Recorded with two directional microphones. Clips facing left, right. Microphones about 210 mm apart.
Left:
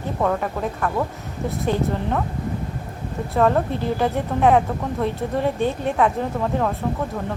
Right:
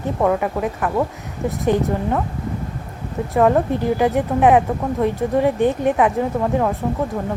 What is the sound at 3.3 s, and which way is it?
A woman's voice, 15° right (ahead or behind).